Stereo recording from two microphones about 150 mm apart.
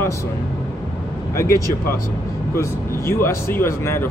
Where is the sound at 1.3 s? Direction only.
20° left (ahead or behind).